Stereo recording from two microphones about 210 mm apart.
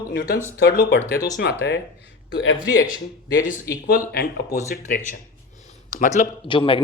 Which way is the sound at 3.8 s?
45° left (ahead or behind).